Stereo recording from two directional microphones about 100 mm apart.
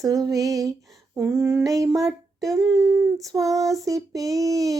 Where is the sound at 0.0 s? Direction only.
35° right (ahead or behind).